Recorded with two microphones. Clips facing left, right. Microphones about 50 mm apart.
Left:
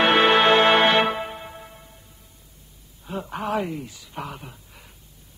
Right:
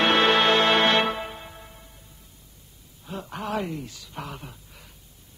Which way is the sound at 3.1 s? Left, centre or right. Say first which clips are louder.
Left 4 dB; centre.